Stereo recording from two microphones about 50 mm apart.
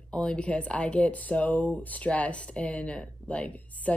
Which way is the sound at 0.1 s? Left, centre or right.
Left.